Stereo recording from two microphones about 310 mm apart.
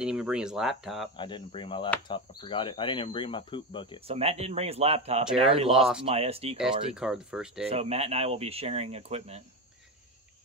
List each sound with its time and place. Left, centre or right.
0.0 s speech: centre
1.1 s speech: centre
4.1 s speech: centre
6.9 s speech: centre
7.6 s speech: centre